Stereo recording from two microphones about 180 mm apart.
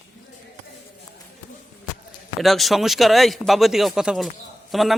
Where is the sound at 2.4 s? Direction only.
Centre (ahead or behind).